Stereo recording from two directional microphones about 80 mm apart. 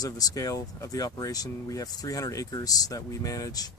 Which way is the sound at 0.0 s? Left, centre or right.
Left.